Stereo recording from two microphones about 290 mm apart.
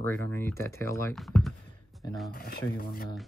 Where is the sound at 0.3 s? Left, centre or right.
Centre.